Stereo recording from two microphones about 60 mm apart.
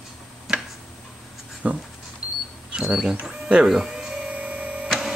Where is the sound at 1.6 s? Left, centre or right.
Centre.